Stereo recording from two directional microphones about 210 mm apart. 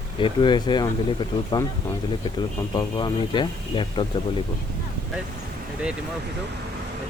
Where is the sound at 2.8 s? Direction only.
20° left (ahead or behind).